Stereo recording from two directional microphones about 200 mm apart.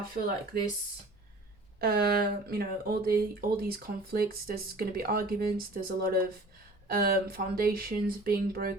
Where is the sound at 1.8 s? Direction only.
50° right (ahead or behind).